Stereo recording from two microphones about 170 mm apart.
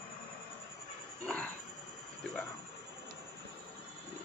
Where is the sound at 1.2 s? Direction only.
10° left (ahead or behind).